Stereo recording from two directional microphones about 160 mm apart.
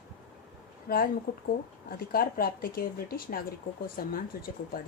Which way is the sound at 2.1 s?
70° left (ahead or behind).